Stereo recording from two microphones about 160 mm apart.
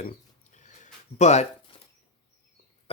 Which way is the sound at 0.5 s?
50° left (ahead or behind).